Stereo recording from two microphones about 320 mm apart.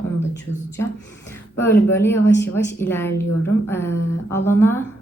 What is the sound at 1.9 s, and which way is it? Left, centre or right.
A woman's voice, centre.